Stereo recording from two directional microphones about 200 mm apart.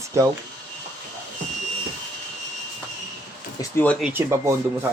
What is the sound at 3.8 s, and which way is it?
Speech, 5° left (ahead or behind).